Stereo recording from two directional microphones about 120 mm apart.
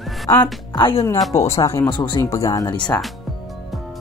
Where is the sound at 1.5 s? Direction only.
25° left (ahead or behind).